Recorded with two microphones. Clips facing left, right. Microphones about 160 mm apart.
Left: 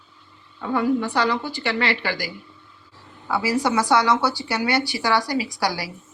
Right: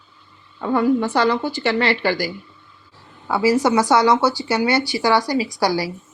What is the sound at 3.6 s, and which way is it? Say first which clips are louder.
Speech: right 4 dB; 40° right (ahead or behind).